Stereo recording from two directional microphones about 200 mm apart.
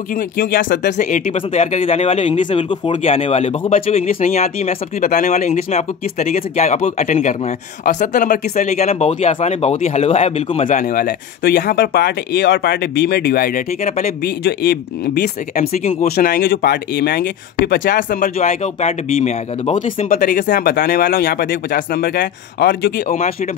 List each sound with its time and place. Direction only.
0.1 s speech: 45° left (ahead or behind)
23.0 s speech: 40° left (ahead or behind)